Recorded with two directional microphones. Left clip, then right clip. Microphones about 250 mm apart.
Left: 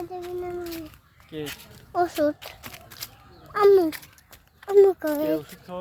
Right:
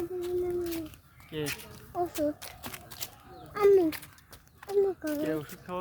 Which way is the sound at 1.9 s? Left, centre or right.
Left.